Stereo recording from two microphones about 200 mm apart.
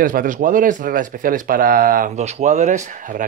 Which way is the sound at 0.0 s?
40° right (ahead or behind).